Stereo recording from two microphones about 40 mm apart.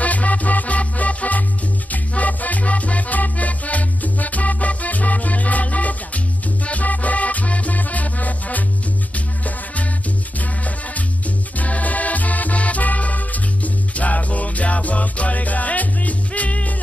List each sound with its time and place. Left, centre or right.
0.0 s music: left